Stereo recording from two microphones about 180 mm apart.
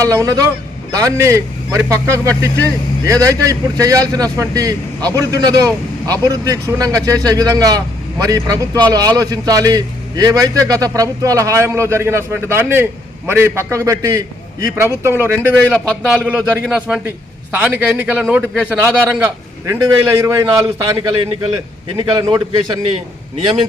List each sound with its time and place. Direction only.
0.0 s a man's voice: 20° right (ahead or behind)